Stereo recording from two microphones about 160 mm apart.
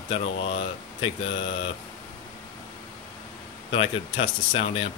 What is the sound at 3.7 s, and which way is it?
Speech, 35° left (ahead or behind).